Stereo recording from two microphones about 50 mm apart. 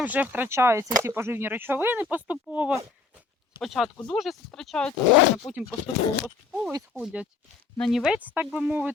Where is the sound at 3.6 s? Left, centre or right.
Centre.